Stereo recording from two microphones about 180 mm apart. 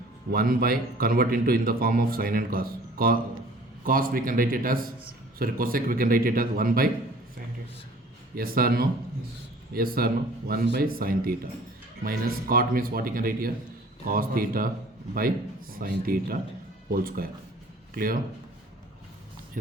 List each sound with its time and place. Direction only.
0.3 s a man's voice: 55° right (ahead or behind)
8.4 s a man's voice: 55° right (ahead or behind)
15.8 s a man's voice: 55° right (ahead or behind)